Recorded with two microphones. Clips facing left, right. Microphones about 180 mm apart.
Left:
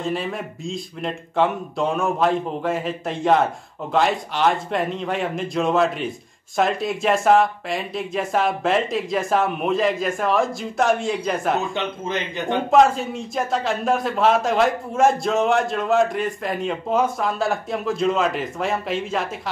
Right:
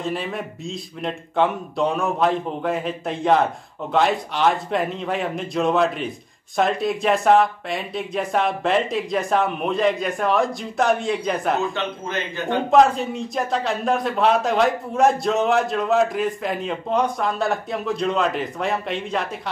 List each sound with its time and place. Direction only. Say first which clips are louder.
0.0 s speech: left 1 dB; centre (ahead or behind)
11.7 s speech: left 1 dB; 20° left (ahead or behind)
12.7 s speech: even; centre (ahead or behind)